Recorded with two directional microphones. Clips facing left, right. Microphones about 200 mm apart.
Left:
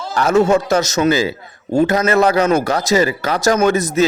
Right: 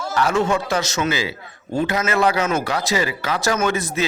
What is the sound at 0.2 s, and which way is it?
A man's voice, 45° left (ahead or behind).